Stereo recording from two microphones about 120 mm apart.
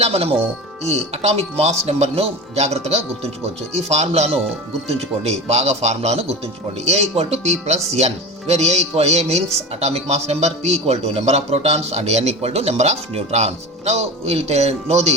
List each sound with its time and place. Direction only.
0.0 s a man's voice: 55° right (ahead or behind)